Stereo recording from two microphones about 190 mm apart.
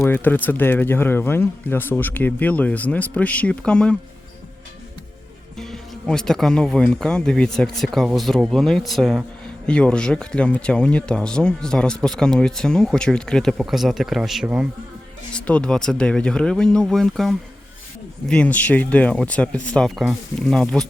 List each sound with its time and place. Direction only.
0.0 s speech: 10° left (ahead or behind)
5.5 s speech: centre (ahead or behind)
15.3 s speech: 5° left (ahead or behind)